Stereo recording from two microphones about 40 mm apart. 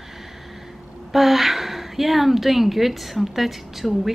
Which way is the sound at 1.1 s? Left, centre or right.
Centre.